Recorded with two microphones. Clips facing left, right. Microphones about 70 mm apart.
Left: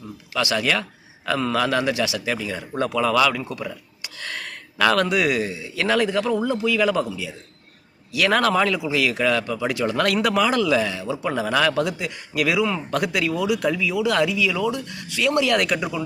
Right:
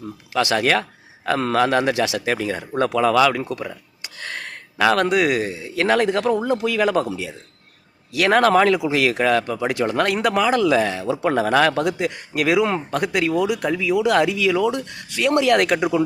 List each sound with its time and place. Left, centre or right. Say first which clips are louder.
0.3 s a man's voice: right 4 dB; right
1.9 s a man's voice: right 3 dB; right
4.2 s a sound: right 1 dB; right
5.0 s a man's voice: right 3 dB; right
8.1 s a man's voice: right 4 dB; right
12.9 s a man's voice: right 2 dB; right